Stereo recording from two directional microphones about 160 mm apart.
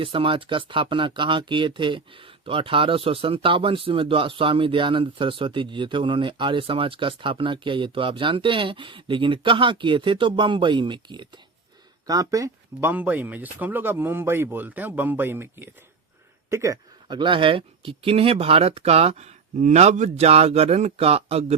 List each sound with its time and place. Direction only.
0.0 s speech: 30° right (ahead or behind)